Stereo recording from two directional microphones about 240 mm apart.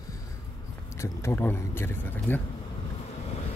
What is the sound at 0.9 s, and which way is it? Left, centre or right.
Speech, centre.